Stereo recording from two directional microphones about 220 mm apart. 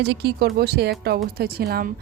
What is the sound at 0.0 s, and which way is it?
A woman's voice, 50° right (ahead or behind).